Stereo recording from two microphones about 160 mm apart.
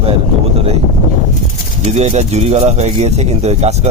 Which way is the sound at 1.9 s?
45° right (ahead or behind).